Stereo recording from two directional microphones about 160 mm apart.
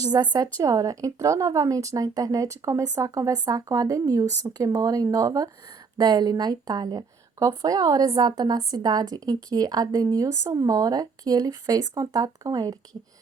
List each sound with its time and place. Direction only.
0.0 s a woman's voice: 25° right (ahead or behind)